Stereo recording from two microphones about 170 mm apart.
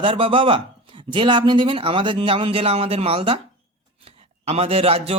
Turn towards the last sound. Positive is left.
turn(degrees=-35)  # may be behind; listen again after turning